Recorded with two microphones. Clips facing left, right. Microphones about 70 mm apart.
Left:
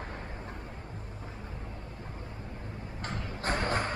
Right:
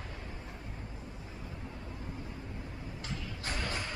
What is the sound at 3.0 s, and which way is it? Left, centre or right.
Music, left.